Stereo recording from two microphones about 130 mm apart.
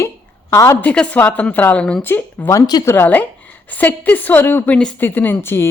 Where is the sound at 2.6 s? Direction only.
30° left (ahead or behind).